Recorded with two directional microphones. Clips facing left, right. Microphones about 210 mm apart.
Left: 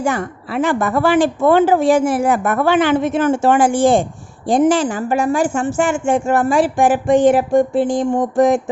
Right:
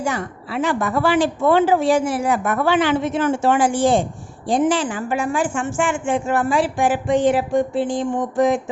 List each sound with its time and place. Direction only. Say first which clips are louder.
0.0 s a woman's voice: left 4 dB; 55° left (ahead or behind)